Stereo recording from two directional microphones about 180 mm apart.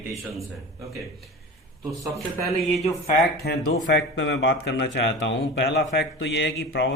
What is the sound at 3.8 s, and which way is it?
Speech, 75° left (ahead or behind).